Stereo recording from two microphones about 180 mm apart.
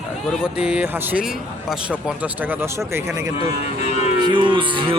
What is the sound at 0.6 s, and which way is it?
Speech, 5° right (ahead or behind).